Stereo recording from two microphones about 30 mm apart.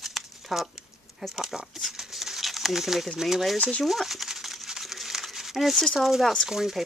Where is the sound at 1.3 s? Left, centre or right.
Centre.